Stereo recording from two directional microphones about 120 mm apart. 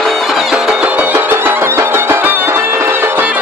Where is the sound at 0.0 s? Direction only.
Centre (ahead or behind).